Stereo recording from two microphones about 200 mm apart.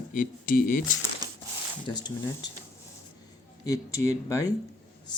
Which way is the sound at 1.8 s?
20° left (ahead or behind).